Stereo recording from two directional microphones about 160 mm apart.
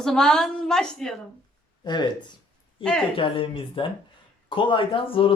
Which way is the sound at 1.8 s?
30° left (ahead or behind).